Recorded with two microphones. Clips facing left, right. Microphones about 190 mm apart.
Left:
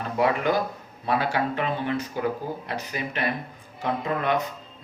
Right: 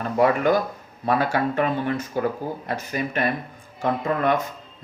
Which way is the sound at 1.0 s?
45° right (ahead or behind).